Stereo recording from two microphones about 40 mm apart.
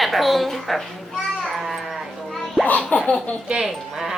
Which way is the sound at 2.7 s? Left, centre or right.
Left.